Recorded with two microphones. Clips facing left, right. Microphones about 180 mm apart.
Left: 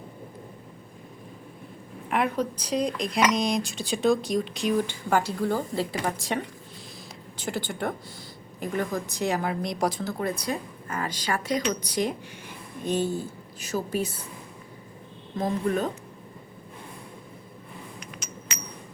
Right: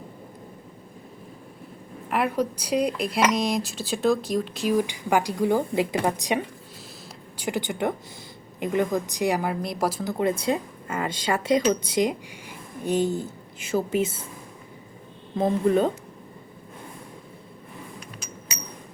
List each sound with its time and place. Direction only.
2.0 s a woman's voice: 5° right (ahead or behind)
10.1 s speech: 20° right (ahead or behind)
15.4 s speech: 25° right (ahead or behind)